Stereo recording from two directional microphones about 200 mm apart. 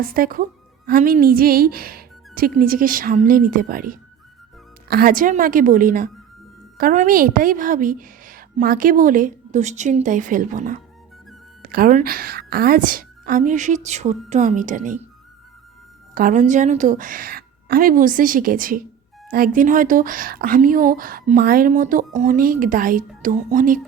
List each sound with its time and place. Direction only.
0.0 s a woman's voice: 45° right (ahead or behind)
16.1 s speech: 40° right (ahead or behind)